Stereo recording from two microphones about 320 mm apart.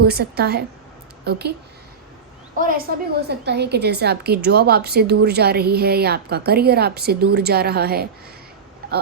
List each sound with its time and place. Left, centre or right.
0.0 s a woman's voice: right
2.6 s a woman's voice: right